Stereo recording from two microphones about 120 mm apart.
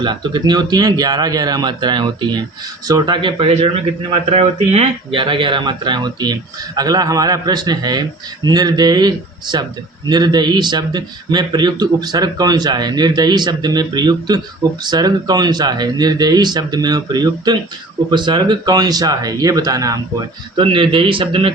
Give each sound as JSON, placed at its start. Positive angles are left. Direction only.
{"t": 0.0, "sound": "a man's voice", "side_deg": -40}
{"t": 20.6, "sound": "speech", "side_deg": -45}